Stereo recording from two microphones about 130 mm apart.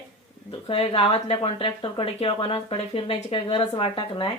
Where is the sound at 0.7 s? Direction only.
45° left (ahead or behind).